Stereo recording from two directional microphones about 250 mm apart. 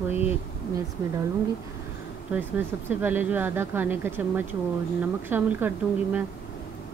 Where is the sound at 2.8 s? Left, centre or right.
Centre.